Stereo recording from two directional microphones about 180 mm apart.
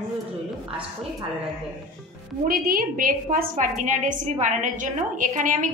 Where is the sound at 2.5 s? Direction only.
50° right (ahead or behind).